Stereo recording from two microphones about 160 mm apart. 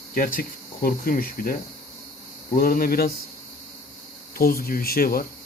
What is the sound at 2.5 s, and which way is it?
Speech, 65° left (ahead or behind).